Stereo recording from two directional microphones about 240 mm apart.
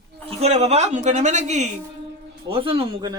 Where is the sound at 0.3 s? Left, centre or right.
Right.